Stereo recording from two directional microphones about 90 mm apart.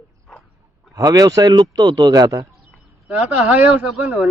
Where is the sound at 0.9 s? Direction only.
45° right (ahead or behind).